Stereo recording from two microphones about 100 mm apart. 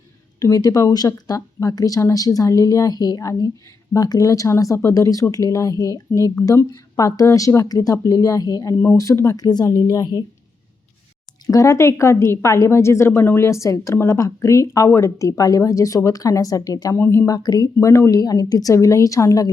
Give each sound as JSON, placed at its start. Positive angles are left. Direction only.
{"t": 0.3, "sound": "a woman's voice", "side_deg": 35}
{"t": 8.8, "sound": "a woman's voice", "side_deg": 30}
{"t": 11.4, "sound": "a woman's voice", "side_deg": 35}
{"t": 17.0, "sound": "a woman's voice", "side_deg": 25}
{"t": 17.3, "sound": "a woman's voice", "side_deg": 40}